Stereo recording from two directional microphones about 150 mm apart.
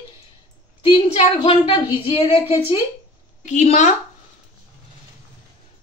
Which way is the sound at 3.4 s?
50° left (ahead or behind).